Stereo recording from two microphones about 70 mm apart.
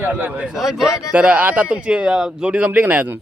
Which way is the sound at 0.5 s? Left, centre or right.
Centre.